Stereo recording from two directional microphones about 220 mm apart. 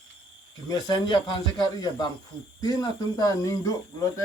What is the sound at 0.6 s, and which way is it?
Speech, 20° left (ahead or behind).